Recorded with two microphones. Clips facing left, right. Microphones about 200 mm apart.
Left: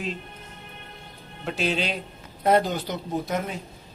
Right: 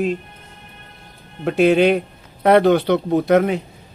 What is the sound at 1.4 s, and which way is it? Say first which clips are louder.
A man's voice: right 13 dB; 55° right (ahead or behind).